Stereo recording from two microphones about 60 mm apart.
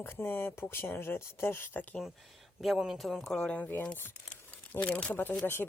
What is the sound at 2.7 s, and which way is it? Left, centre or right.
Speech, centre.